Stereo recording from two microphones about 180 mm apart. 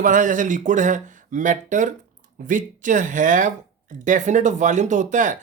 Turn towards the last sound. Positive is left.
turn(degrees=-45)  # may be behind; listen again after turning